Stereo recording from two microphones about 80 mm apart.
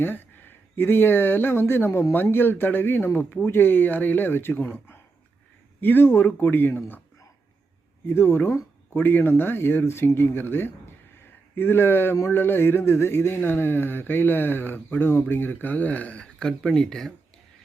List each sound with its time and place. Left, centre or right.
0.0 s a man's voice: left
8.0 s a man's voice: left; by 17.1 s centre